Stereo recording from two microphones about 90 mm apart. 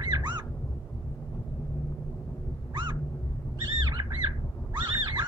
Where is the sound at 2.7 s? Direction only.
60° right (ahead or behind).